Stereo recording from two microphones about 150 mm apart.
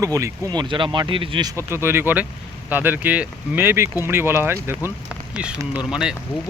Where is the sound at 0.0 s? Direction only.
20° right (ahead or behind).